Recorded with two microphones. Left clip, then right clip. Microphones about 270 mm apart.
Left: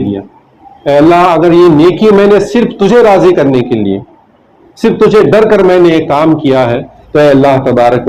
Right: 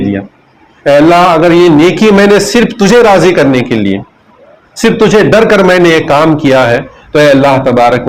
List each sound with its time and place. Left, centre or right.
0.9 s a man's voice: right